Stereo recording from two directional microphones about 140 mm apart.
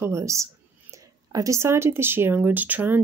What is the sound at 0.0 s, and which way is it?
Speech, 20° right (ahead or behind).